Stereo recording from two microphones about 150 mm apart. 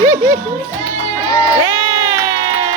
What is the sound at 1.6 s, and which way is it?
Crowd, 25° right (ahead or behind).